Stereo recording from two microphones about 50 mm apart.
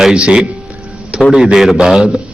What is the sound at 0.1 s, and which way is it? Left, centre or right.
Speech, right.